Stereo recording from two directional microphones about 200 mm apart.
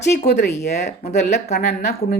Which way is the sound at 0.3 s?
55° left (ahead or behind).